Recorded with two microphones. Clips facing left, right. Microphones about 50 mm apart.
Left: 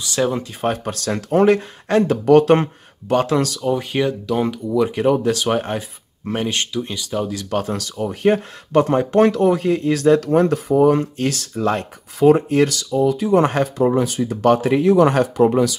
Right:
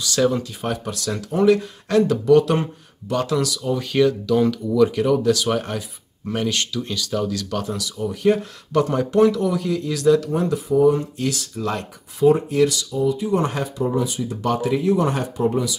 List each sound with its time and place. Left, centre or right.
0.0 s speech: left
0.6 s speech: left
3.6 s speech: left
7.4 s speech: left
10.3 s speech: left